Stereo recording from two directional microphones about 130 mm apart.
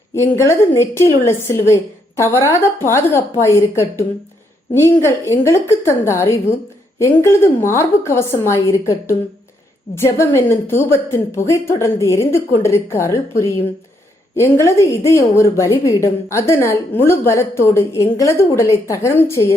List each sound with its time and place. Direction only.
0.2 s a woman's voice: 20° left (ahead or behind)
14.3 s a woman's voice: 20° left (ahead or behind)